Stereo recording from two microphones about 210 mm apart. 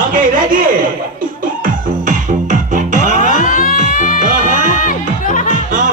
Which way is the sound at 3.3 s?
40° left (ahead or behind).